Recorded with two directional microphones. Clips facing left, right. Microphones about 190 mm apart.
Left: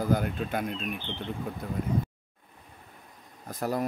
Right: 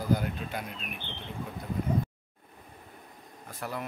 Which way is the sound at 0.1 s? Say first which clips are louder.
Right 2 dB; 50° left (ahead or behind).